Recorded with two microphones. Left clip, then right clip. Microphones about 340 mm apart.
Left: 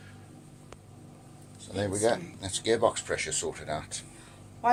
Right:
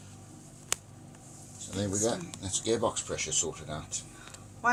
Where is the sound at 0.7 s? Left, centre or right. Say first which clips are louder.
Right 17 dB; right.